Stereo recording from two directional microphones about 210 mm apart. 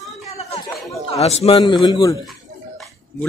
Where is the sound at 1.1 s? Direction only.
30° left (ahead or behind).